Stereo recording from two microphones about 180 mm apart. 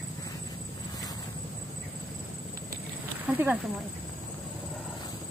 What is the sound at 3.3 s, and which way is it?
Speech, 10° right (ahead or behind).